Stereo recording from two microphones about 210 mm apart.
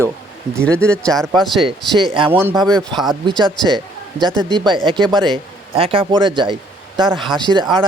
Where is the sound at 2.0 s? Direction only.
20° right (ahead or behind).